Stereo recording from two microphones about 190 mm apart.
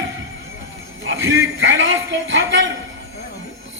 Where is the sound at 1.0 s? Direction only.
90° right.